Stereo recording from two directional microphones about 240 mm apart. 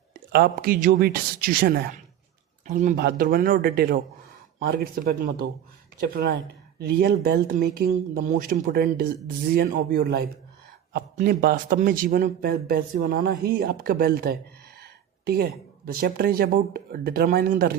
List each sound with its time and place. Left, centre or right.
0.1 s a man's voice: right